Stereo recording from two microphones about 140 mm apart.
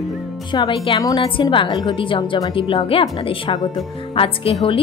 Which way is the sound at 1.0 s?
25° left (ahead or behind).